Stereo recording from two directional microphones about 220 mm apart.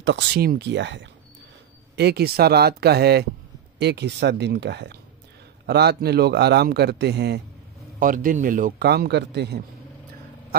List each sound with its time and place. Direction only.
0.0 s a man's voice: 50° right (ahead or behind)
8.0 s a man's voice: 40° right (ahead or behind)